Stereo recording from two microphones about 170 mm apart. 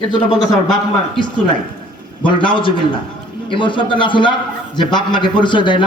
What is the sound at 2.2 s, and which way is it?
A man's voice, 30° left (ahead or behind).